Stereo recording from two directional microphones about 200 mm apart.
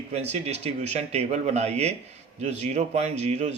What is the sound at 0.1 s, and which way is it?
A man's voice, 35° right (ahead or behind).